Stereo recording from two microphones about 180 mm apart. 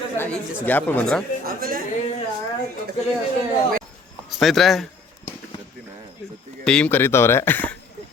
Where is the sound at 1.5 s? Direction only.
55° right (ahead or behind).